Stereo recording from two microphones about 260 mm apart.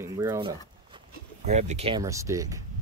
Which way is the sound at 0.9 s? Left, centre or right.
Right.